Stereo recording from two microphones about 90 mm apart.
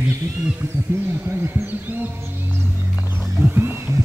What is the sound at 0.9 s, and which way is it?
Speech, 30° right (ahead or behind).